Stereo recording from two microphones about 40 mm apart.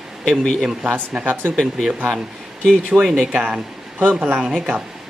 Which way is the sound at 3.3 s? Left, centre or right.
Right.